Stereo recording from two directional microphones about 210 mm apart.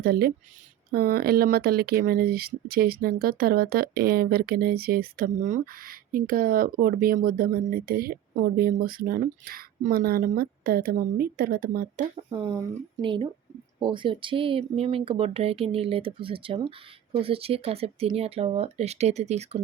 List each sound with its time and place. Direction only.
0.0 s speech: 45° right (ahead or behind)
12.3 s speech: 20° right (ahead or behind)